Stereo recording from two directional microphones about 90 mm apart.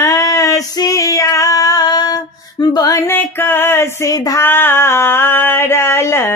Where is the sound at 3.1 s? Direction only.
25° left (ahead or behind).